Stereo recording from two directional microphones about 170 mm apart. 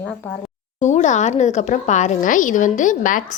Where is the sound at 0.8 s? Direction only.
45° left (ahead or behind).